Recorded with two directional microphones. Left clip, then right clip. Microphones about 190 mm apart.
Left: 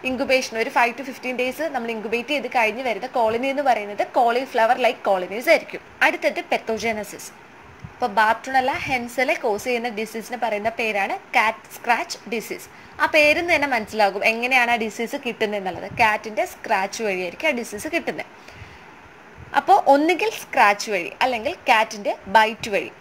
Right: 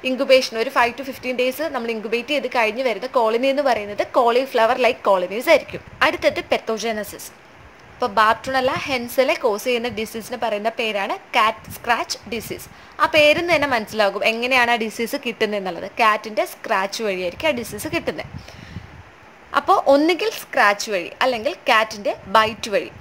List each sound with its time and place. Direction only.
0.0 s a woman's voice: 15° right (ahead or behind)
19.5 s a woman's voice: 10° right (ahead or behind)